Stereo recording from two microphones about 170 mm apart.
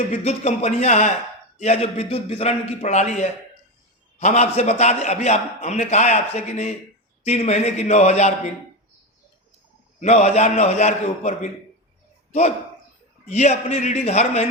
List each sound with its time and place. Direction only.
0.1 s a man's voice: 45° left (ahead or behind)
10.0 s a man's voice: 40° left (ahead or behind)
13.2 s a man's voice: 45° left (ahead or behind)